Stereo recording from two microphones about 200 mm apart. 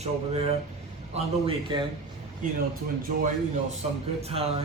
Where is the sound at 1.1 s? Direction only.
25° right (ahead or behind).